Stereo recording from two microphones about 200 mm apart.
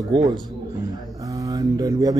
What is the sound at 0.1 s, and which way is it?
Speech, 20° right (ahead or behind).